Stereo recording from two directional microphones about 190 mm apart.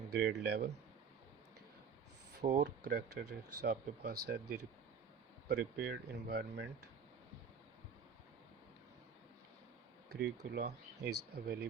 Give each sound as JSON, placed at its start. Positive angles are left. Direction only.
{"t": 0.1, "sound": "speech", "side_deg": -60}
{"t": 2.6, "sound": "speech", "side_deg": -60}
{"t": 10.1, "sound": "speech", "side_deg": -60}